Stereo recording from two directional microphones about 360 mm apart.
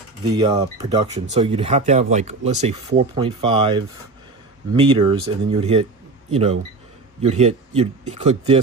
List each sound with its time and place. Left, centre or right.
0.3 s speech: centre